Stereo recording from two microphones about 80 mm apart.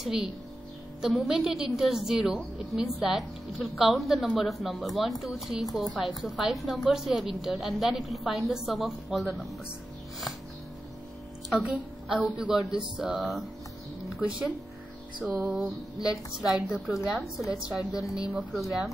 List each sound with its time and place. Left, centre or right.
0.0 s a woman's voice: centre
12.4 s music: centre
13.2 s a woman's voice: centre
15.2 s music: centre
16.3 s a woman's voice: centre
18.1 s music: centre
18.5 s a woman's voice: centre